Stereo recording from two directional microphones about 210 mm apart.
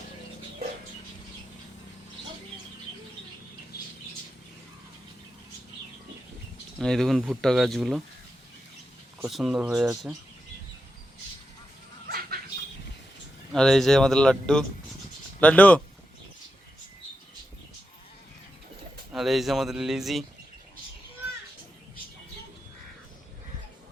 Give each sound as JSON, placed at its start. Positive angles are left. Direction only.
{"t": 3.7, "sound": "squawk", "side_deg": 50}
{"t": 6.7, "sound": "speech", "side_deg": 0}
{"t": 9.2, "sound": "speech", "side_deg": 0}
{"t": 13.5, "sound": "speech", "side_deg": 0}
{"t": 19.1, "sound": "speech", "side_deg": 0}